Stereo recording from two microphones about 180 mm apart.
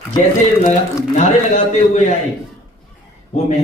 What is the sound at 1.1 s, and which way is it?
A man's voice, 40° left (ahead or behind).